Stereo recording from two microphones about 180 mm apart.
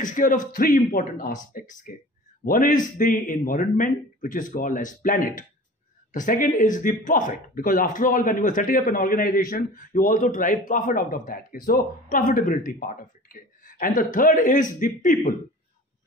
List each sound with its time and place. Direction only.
0.0 s speech: 45° left (ahead or behind)